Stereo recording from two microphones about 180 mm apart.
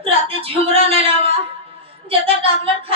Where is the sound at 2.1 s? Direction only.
30° right (ahead or behind).